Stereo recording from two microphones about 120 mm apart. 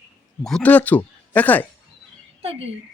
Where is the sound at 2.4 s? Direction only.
55° right (ahead or behind).